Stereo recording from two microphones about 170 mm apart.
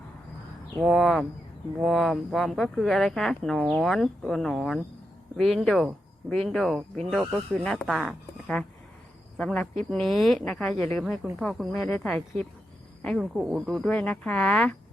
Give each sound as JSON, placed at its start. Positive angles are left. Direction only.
{"t": 0.8, "sound": "speech", "side_deg": 0}
{"t": 11.8, "sound": "speech", "side_deg": 15}
{"t": 12.0, "sound": "speech", "side_deg": 5}